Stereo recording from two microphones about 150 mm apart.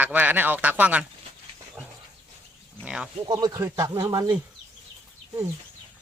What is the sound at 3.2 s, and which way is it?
A man's voice, 25° right (ahead or behind).